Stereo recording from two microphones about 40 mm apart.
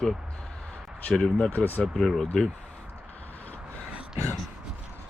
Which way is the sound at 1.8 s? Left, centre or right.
Centre.